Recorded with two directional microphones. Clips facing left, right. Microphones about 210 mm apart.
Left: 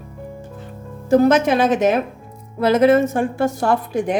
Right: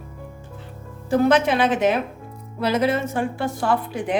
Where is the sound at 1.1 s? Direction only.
45° left (ahead or behind).